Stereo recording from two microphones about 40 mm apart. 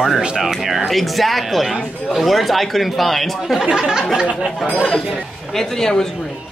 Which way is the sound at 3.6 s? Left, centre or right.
Centre.